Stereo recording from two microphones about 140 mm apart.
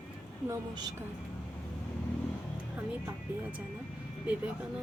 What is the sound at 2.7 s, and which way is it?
Speech, 10° right (ahead or behind).